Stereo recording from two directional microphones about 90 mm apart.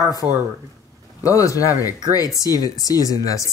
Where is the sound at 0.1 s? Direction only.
45° left (ahead or behind).